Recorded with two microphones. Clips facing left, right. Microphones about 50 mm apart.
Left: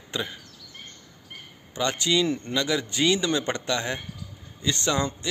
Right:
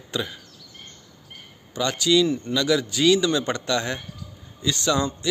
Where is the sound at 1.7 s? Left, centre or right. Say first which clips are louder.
Right 4 dB; left.